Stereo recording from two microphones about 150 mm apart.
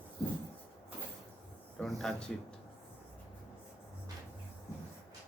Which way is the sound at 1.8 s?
Centre (ahead or behind).